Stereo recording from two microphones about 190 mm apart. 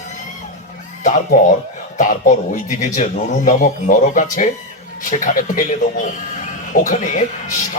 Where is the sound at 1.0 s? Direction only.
45° left (ahead or behind).